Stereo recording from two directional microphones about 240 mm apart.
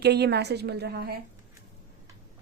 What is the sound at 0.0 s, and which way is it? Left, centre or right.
A woman's voice, right.